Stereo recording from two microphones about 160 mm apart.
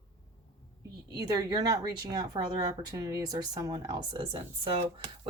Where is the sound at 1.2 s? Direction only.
25° right (ahead or behind).